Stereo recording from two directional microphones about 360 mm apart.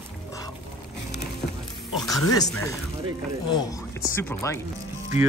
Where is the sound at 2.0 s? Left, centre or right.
Centre.